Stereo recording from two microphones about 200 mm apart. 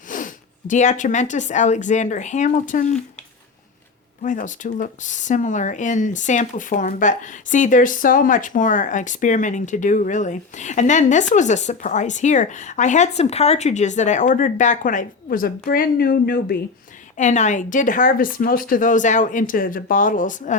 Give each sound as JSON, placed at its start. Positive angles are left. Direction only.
{"t": 0.1, "sound": "speech", "side_deg": 40}
{"t": 4.2, "sound": "speech", "side_deg": 40}
{"t": 17.2, "sound": "speech", "side_deg": 35}